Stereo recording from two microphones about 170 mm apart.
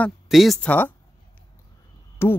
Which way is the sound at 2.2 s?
15° left (ahead or behind).